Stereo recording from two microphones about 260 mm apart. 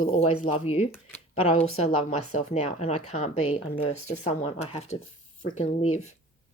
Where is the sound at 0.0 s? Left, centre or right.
Left.